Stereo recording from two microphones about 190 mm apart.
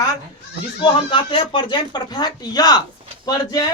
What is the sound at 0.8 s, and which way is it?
Speech, 25° left (ahead or behind).